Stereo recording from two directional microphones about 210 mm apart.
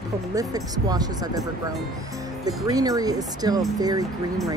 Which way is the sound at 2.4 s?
15° right (ahead or behind).